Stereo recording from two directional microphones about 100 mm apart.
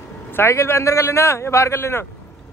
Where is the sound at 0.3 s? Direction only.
25° left (ahead or behind).